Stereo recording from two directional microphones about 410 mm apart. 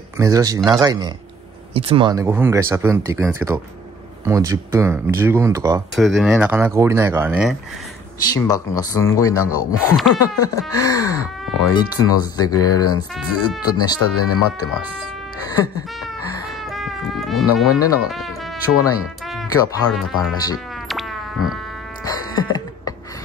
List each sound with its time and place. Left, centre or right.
0.2 s speech: centre
8.3 s speech: centre
14.1 s speech: left
16.7 s music: centre
17.6 s speech: centre
22.0 s music: centre